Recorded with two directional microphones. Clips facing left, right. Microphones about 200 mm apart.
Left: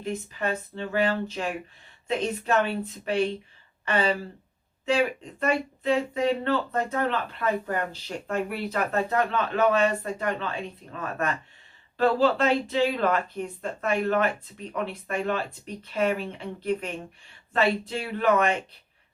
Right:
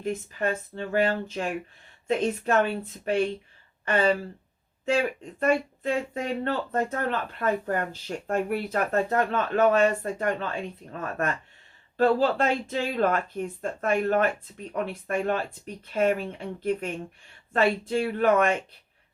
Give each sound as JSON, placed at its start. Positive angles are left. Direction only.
{"t": 0.0, "sound": "speech", "side_deg": -45}